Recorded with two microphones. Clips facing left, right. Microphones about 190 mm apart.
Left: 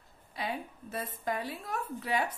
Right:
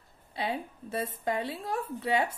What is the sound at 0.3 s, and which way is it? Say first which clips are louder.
A woman's voice: right 3 dB; 30° right (ahead or behind).